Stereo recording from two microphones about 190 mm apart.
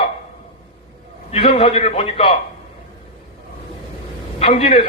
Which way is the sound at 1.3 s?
30° left (ahead or behind).